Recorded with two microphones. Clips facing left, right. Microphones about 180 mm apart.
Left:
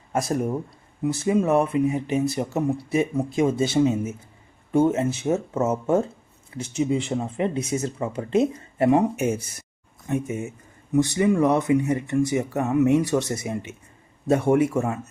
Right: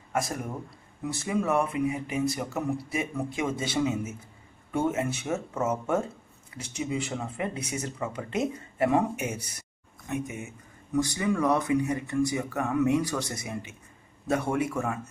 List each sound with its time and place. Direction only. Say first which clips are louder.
1.0 s speech: left 7 dB; 20° left (ahead or behind)